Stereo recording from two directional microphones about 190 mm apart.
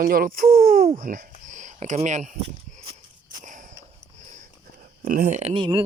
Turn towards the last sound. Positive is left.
turn(degrees=-25)  # may be behind; listen again after turning